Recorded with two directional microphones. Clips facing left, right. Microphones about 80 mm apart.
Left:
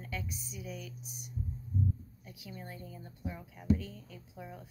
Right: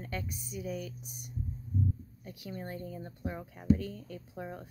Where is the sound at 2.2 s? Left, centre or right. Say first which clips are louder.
Right 6 dB; right.